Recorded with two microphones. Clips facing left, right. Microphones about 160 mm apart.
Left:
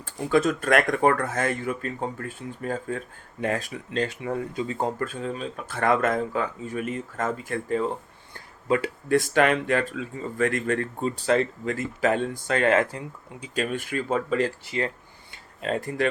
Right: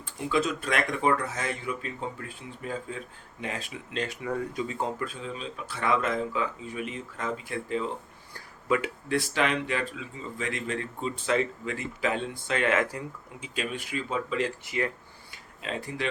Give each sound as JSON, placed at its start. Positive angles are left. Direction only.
{"t": 0.0, "sound": "speech", "side_deg": 50}
{"t": 3.9, "sound": "speech", "side_deg": 30}
{"t": 4.7, "sound": "speech", "side_deg": 45}
{"t": 8.6, "sound": "speech", "side_deg": 35}
{"t": 9.0, "sound": "speech", "side_deg": 50}
{"t": 13.4, "sound": "speech", "side_deg": 45}
{"t": 14.6, "sound": "speech", "side_deg": 30}
{"t": 15.6, "sound": "speech", "side_deg": 50}